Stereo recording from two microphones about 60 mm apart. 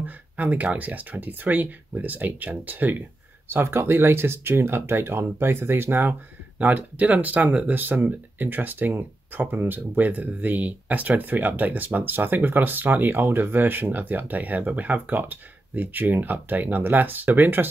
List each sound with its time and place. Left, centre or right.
0.0 s speech: right
3.4 s speech: right